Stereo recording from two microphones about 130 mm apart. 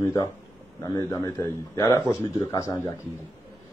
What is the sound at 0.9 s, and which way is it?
A man's voice, 25° left (ahead or behind).